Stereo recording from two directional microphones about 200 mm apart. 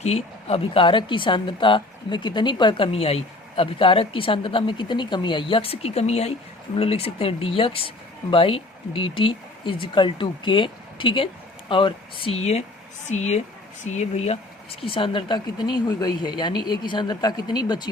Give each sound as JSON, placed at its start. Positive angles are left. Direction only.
{"t": 0.0, "sound": "speech", "side_deg": 30}